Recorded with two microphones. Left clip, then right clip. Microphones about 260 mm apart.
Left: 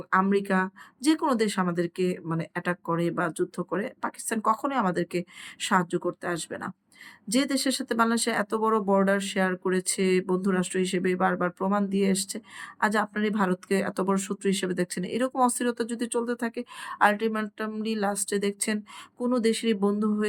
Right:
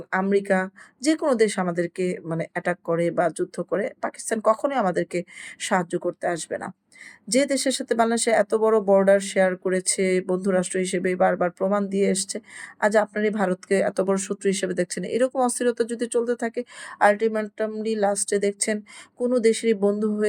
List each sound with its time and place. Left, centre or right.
0.1 s speech: centre